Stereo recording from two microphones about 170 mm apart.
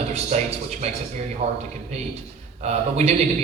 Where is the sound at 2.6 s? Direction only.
40° right (ahead or behind).